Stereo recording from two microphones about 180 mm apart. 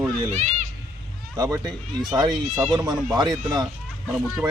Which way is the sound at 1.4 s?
20° right (ahead or behind).